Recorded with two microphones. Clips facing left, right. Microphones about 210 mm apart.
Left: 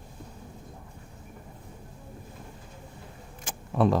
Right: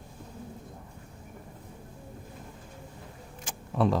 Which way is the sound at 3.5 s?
50° left (ahead or behind).